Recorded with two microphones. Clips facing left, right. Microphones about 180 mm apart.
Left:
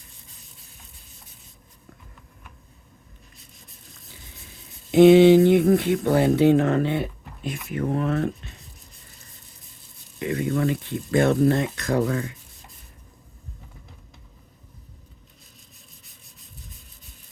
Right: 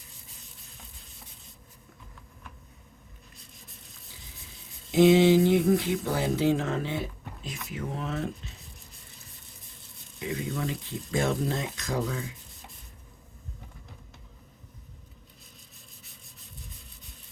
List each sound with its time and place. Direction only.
4.9 s speech: 60° left (ahead or behind)
10.2 s speech: 60° left (ahead or behind)